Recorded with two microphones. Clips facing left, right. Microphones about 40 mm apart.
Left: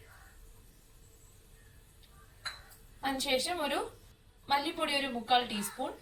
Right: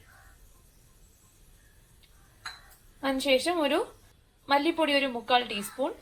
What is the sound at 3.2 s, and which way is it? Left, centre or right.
A woman's voice, right.